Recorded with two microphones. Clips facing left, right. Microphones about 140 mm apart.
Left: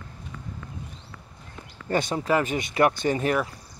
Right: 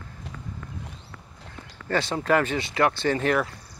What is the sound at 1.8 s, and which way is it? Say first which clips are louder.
Speech: even; 15° left (ahead or behind).